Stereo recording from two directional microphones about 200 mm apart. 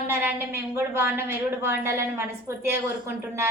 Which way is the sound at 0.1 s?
10° right (ahead or behind).